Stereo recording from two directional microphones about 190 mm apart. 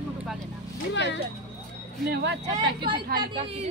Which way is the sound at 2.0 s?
60° right (ahead or behind).